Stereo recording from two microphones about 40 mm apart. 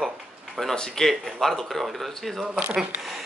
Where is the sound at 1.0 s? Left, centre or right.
Centre.